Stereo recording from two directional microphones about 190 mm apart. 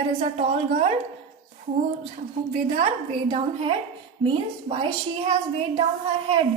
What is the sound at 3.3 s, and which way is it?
Speech, 30° right (ahead or behind).